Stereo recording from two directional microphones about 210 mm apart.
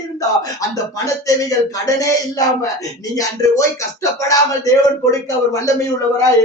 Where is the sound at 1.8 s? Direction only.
15° left (ahead or behind).